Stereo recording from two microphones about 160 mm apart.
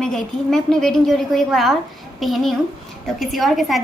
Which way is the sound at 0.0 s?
5° left (ahead or behind).